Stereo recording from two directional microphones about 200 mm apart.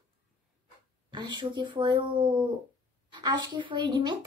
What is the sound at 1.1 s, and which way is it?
A woman's voice, 20° right (ahead or behind).